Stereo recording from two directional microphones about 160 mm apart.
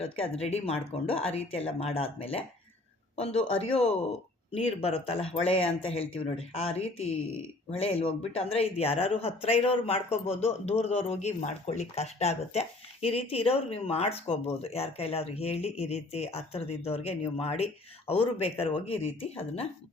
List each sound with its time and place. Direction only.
0.0 s speech: 40° left (ahead or behind)